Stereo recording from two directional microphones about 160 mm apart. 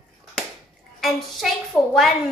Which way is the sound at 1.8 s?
15° left (ahead or behind).